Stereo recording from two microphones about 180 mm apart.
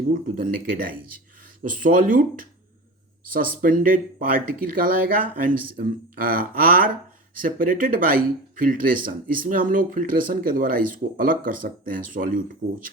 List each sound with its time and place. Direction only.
0.1 s speech: 50° right (ahead or behind)